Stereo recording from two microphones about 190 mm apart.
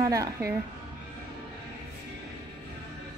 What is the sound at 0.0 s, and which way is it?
Speech, 15° right (ahead or behind).